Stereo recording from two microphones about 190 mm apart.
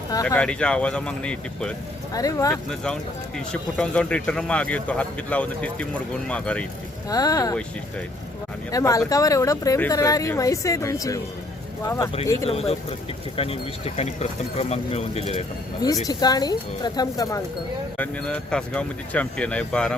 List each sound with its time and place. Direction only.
0.1 s speech: 15° left (ahead or behind)
0.3 s speech: 5° left (ahead or behind)
2.1 s speech: 20° left (ahead or behind)
2.6 s speech: 5° left (ahead or behind)
7.1 s speech: 20° left (ahead or behind)
8.7 s speech: 15° left (ahead or behind)
12.5 s speech: 30° left (ahead or behind)
16.0 s speech: 20° left (ahead or behind)
17.9 s speech: 5° left (ahead or behind)